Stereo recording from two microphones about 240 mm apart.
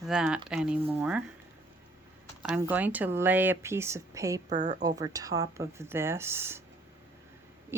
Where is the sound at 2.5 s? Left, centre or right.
Centre.